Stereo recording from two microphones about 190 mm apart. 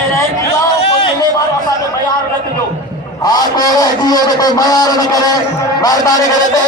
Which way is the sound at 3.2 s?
20° left (ahead or behind).